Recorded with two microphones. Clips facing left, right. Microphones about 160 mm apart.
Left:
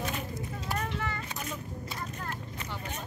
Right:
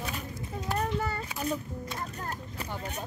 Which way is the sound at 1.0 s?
40° right (ahead or behind).